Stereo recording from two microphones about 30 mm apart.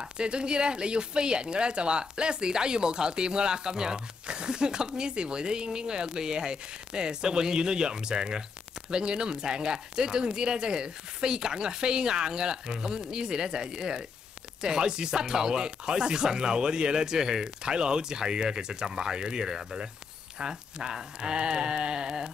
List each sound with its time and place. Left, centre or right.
0.2 s speech: right